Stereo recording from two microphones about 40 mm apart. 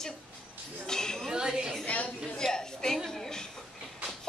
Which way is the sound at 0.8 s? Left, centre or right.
Centre.